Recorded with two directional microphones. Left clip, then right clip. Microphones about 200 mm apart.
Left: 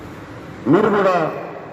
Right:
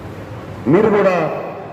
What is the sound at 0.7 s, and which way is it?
Speech, 30° left (ahead or behind).